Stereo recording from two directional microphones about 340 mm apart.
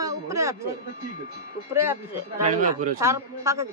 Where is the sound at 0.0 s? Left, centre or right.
Centre.